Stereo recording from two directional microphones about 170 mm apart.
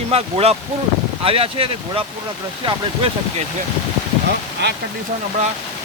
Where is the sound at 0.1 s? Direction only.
35° right (ahead or behind).